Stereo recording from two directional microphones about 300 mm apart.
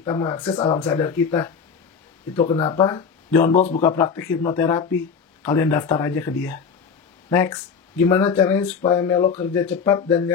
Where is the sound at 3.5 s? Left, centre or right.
Left.